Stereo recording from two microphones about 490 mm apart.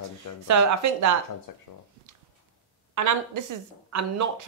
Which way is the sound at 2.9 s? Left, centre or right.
Right.